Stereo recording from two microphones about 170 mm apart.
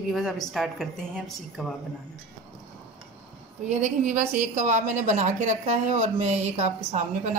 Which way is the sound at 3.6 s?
45° right (ahead or behind).